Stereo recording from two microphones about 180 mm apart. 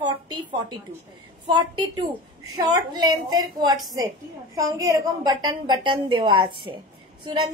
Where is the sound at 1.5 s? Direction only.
25° right (ahead or behind).